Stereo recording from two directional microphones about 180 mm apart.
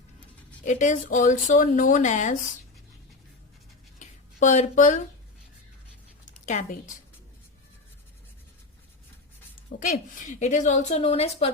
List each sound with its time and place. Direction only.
0.6 s speech: 45° left (ahead or behind)
3.9 s a sound: 40° left (ahead or behind)
6.4 s a woman's voice: 40° left (ahead or behind)
9.7 s a woman's voice: 65° left (ahead or behind)
10.4 s a woman's voice: 40° left (ahead or behind)